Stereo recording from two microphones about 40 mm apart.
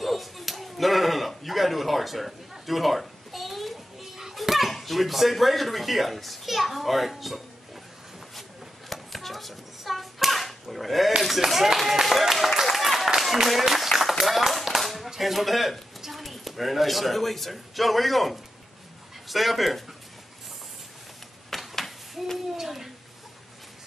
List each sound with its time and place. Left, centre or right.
0.0 s slap: centre
4.2 s speech: centre
8.4 s a sound: centre
11.2 s speech: centre
12.6 s a sound: centre
14.0 s clapping: centre
15.0 s speech: centre
21.5 s a sound: centre
22.6 s speech: centre